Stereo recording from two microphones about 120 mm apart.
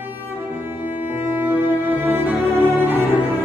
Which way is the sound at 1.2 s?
15° right (ahead or behind).